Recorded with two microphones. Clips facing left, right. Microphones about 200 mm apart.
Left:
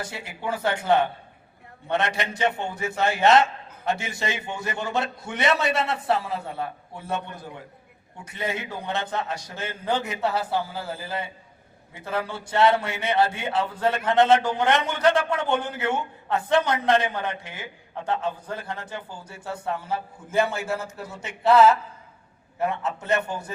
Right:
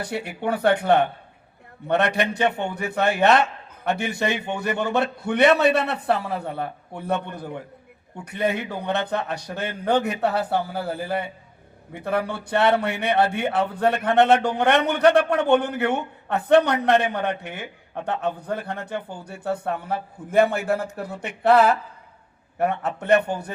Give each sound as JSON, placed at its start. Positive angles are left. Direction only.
{"t": 0.0, "sound": "a man's voice", "side_deg": -60}